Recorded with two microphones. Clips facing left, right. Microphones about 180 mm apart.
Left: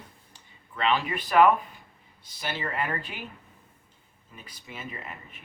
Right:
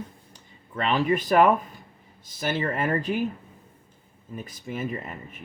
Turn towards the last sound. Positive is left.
turn(degrees=-50)  # may be behind; listen again after turning